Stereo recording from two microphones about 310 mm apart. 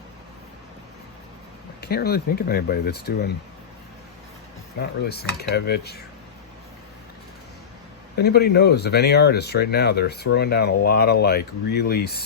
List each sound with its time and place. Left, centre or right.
1.8 s speech: left
4.8 s speech: left
8.1 s speech: left